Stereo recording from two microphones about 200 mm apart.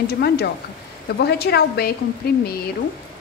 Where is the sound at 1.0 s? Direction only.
55° left (ahead or behind).